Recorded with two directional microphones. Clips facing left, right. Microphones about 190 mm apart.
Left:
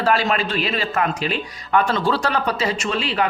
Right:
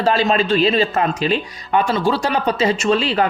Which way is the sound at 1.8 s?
10° right (ahead or behind).